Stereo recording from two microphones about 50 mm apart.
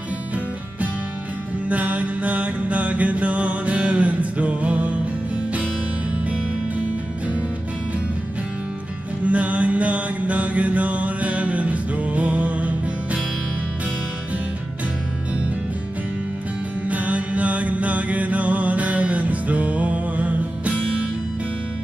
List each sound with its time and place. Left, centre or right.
1.7 s music: right
9.2 s music: right
16.8 s mantra: right